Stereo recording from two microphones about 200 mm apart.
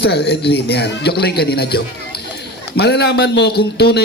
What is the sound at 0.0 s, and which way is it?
A man's voice, 55° left (ahead or behind).